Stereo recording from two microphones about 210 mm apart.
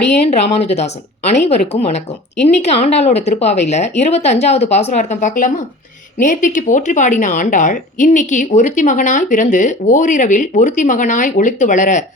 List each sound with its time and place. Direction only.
0.3 s a woman's voice: 30° left (ahead or behind)